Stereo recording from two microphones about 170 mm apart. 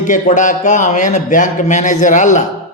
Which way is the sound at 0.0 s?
45° left (ahead or behind).